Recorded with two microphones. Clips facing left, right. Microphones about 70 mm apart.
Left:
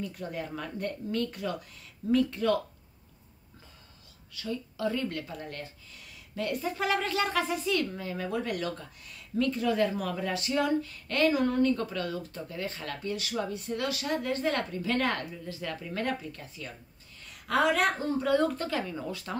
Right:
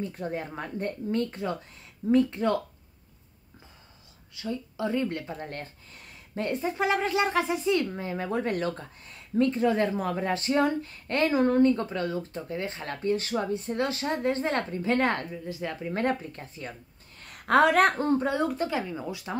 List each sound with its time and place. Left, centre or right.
0.0 s speech: right
4.4 s speech: right
17.2 s a woman's voice: right
18.4 s speech: centre